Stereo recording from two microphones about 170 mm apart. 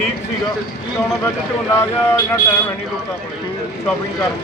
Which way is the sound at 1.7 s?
15° left (ahead or behind).